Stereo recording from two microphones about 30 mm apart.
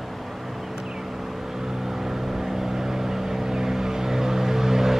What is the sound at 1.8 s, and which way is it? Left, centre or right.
Vehicle, centre.